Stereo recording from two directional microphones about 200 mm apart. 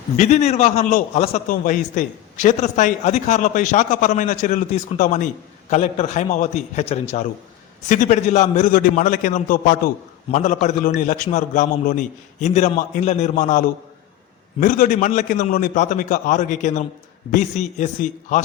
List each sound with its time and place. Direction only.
0.2 s a man's voice: 35° left (ahead or behind)